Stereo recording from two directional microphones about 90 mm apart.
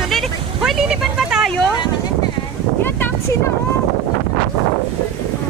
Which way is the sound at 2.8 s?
25° left (ahead or behind).